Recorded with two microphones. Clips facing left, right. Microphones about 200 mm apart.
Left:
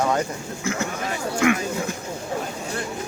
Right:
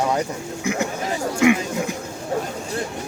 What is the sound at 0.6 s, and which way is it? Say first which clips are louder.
Speech: right 3 dB; 15° right (ahead or behind).